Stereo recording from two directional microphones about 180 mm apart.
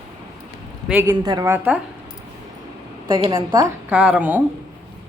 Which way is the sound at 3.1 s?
25° right (ahead or behind).